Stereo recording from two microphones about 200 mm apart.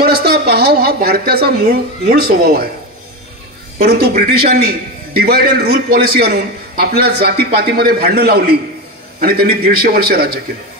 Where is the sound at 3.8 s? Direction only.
50° right (ahead or behind).